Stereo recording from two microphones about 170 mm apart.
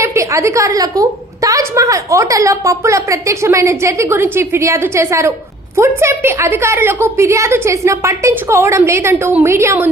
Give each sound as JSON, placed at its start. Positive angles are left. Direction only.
{"t": 0.0, "sound": "a woman's voice", "side_deg": -15}